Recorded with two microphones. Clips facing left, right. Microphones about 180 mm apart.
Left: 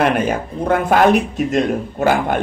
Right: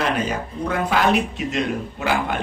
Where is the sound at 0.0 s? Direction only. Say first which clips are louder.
Left 6 dB; 60° left (ahead or behind).